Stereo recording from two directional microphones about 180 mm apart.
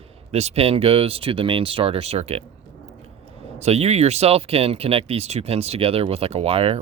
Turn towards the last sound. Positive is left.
turn(degrees=-35)  # may be behind; listen again after turning